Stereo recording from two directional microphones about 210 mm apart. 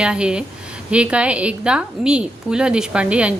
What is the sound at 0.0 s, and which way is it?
A woman's voice, 5° right (ahead or behind).